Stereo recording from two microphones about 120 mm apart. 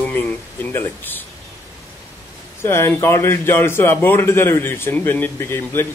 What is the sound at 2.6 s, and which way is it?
Speech, 20° left (ahead or behind).